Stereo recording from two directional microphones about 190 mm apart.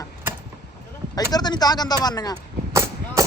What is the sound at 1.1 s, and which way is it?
Speech, 20° left (ahead or behind).